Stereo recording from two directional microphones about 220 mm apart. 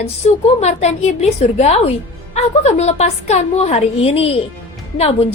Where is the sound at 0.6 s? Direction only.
30° left (ahead or behind).